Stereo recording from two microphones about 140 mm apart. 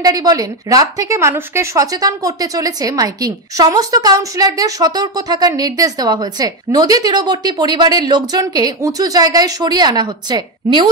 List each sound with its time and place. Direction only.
0.0 s speech: 25° right (ahead or behind)